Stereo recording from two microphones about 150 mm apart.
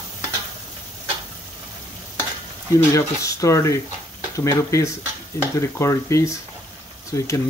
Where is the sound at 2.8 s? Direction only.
20° left (ahead or behind).